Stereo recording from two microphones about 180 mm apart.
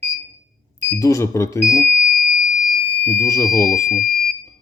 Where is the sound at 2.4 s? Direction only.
5° right (ahead or behind).